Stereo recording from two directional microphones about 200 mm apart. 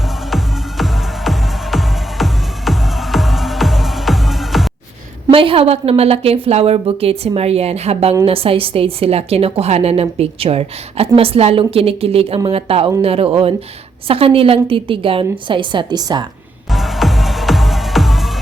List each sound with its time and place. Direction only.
0.3 s music: centre (ahead or behind)
5.3 s a woman's voice: 25° right (ahead or behind)
16.7 s music: centre (ahead or behind)